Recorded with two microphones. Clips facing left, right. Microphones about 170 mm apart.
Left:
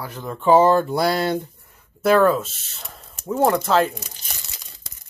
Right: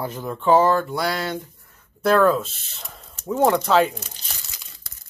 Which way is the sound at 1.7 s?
10° left (ahead or behind).